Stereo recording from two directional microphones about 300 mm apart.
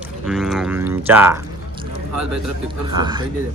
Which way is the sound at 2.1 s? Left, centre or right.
Right.